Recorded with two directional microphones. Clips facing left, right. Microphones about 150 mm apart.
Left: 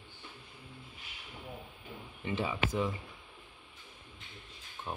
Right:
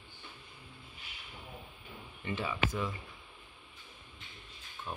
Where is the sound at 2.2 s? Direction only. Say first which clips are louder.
Left 1 dB; 20° left (ahead or behind).